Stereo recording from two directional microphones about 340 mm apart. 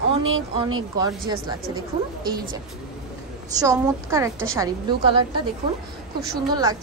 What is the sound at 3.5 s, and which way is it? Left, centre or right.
Speech, centre.